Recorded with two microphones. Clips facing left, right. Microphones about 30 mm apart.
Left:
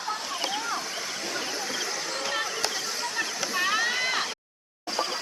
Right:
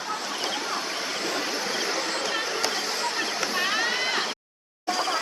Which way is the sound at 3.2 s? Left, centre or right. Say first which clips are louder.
Right 2 dB; right.